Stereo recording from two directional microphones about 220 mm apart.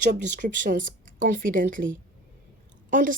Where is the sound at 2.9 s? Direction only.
35° right (ahead or behind).